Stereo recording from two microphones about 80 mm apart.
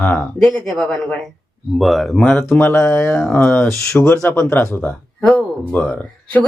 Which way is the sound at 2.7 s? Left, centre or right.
Left.